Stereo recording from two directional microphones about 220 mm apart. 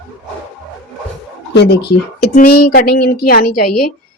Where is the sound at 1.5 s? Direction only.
50° left (ahead or behind).